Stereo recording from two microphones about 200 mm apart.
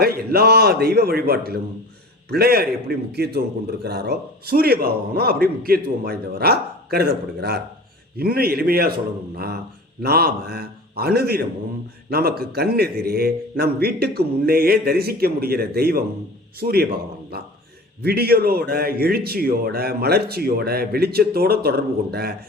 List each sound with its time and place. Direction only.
0.0 s a man's voice: 50° right (ahead or behind)
10.0 s a man's voice: 50° right (ahead or behind)